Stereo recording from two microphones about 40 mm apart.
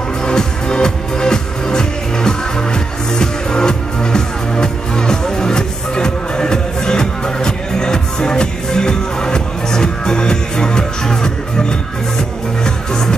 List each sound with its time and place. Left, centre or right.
0.2 s music: centre
12.6 s music: centre